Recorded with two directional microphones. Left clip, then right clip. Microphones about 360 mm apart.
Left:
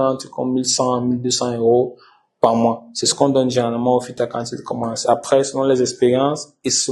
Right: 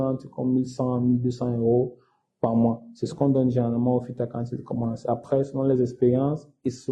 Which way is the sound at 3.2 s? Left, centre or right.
Left.